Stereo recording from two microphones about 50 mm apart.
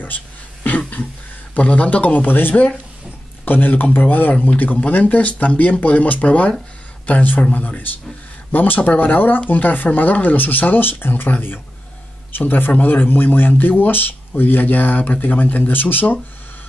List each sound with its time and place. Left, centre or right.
0.7 s throat clearing: left
1.5 s speech: left